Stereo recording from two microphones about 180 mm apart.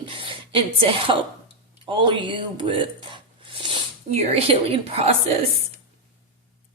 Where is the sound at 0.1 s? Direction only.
30° right (ahead or behind).